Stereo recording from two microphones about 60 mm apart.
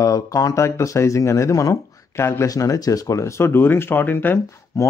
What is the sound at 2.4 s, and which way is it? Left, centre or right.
Speech, left.